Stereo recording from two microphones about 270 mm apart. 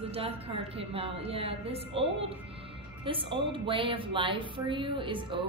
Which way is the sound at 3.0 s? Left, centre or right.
Centre.